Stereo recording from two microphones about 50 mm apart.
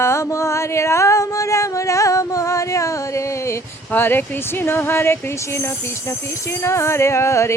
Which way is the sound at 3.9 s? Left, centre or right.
Left.